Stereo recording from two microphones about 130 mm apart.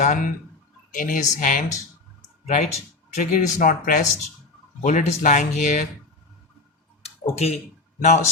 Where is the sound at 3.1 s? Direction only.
80° left.